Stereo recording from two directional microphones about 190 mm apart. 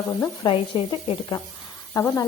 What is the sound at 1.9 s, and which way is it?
Speech, 15° left (ahead or behind).